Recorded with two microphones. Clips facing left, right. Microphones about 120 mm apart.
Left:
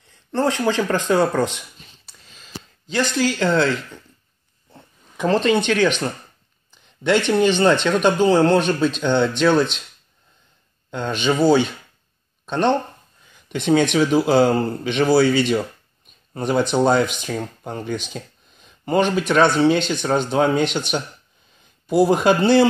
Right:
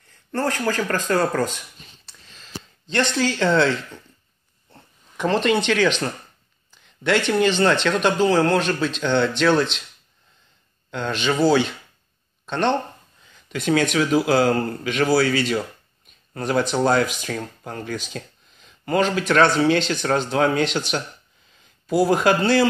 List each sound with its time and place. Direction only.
0.3 s speech: 20° left (ahead or behind)
2.0 s a sound: 5° left (ahead or behind)
5.6 s speech: 15° left (ahead or behind)
10.9 s speech: 15° left (ahead or behind)
13.6 s speech: 25° left (ahead or behind)